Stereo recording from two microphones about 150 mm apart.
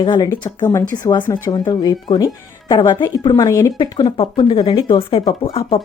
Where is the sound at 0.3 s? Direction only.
15° left (ahead or behind).